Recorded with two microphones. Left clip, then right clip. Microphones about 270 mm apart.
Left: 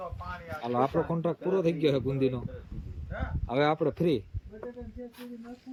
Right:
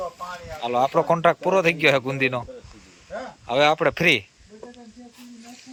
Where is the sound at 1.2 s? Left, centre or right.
Right.